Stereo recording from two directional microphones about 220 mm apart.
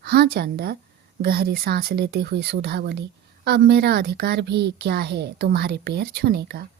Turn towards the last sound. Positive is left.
turn(degrees=-45)  # may be behind; listen again after turning